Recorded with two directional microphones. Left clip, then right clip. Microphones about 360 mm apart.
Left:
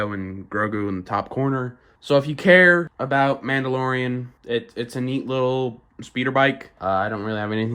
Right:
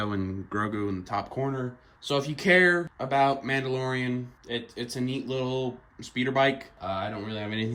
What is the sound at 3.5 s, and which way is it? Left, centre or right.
Speech, left.